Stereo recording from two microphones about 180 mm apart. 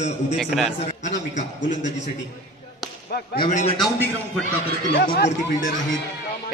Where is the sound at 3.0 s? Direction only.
60° left (ahead or behind).